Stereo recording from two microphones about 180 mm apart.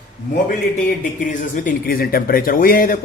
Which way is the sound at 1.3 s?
50° left (ahead or behind).